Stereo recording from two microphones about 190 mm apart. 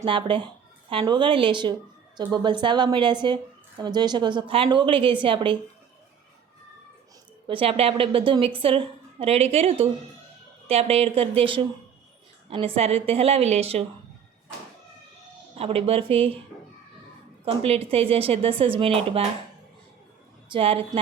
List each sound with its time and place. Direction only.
0.0 s a woman's voice: 25° right (ahead or behind)
7.4 s a woman's voice: 30° right (ahead or behind)
15.5 s a woman's voice: 30° right (ahead or behind)
17.4 s a woman's voice: 30° right (ahead or behind)
20.5 s a woman's voice: 30° right (ahead or behind)